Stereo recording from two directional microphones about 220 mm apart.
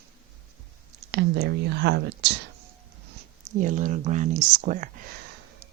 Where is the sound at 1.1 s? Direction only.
50° right (ahead or behind).